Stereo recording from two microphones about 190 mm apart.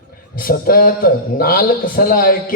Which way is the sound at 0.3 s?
50° left (ahead or behind).